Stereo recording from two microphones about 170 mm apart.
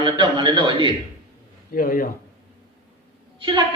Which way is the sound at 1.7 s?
55° left (ahead or behind).